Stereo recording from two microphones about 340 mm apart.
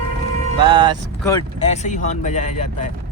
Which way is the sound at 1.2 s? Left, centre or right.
Centre.